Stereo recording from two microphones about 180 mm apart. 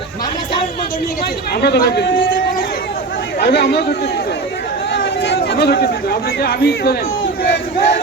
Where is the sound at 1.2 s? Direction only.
65° left (ahead or behind).